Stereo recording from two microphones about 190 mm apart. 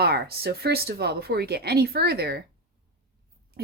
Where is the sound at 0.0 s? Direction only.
55° right (ahead or behind).